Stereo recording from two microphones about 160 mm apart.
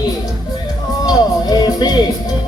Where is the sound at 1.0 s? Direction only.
25° left (ahead or behind).